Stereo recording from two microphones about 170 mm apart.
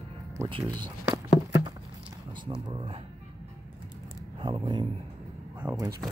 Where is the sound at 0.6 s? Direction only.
25° right (ahead or behind).